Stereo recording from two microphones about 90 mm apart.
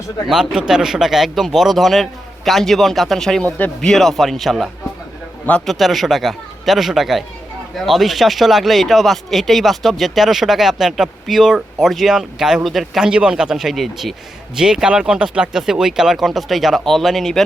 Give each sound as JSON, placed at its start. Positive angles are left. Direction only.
{"t": 0.3, "sound": "speech", "side_deg": -10}